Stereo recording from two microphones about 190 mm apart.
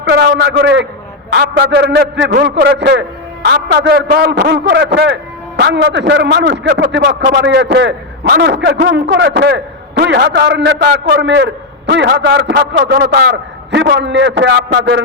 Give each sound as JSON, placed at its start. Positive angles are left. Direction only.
{"t": 0.0, "sound": "a man's voice", "side_deg": -60}